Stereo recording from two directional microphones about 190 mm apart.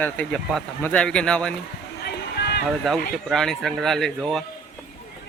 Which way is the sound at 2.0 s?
55° left (ahead or behind).